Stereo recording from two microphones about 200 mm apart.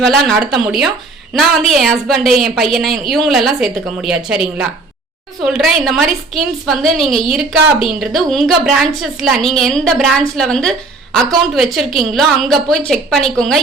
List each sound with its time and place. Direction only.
0.0 s a woman's voice: centre (ahead or behind)